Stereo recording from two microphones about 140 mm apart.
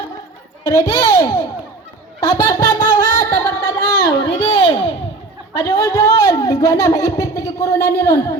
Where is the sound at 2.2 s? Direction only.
25° left (ahead or behind).